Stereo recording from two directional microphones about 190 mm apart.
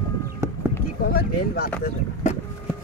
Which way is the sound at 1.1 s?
55° left (ahead or behind).